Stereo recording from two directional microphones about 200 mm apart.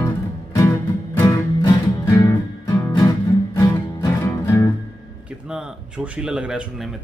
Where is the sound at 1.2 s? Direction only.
15° left (ahead or behind).